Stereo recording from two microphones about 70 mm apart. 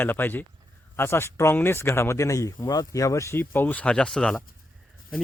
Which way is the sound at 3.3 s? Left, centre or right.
Left.